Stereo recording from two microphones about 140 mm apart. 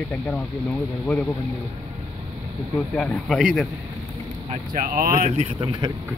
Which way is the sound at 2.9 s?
5° left (ahead or behind).